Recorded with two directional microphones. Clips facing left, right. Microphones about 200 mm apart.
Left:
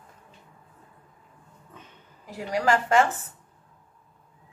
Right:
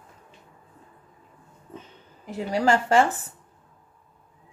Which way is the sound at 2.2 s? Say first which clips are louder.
Right 2 dB; 25° right (ahead or behind).